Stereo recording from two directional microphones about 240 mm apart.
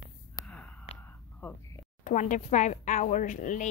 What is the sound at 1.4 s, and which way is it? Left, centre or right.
Speech, centre.